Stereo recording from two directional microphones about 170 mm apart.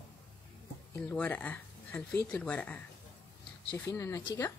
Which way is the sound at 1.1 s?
10° left (ahead or behind).